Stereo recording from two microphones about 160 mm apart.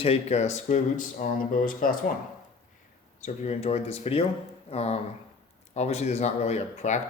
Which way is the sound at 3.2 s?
40° left (ahead or behind).